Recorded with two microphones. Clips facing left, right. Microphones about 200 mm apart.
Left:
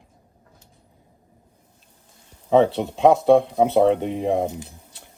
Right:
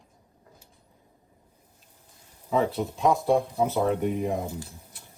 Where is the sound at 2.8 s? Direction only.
65° left (ahead or behind).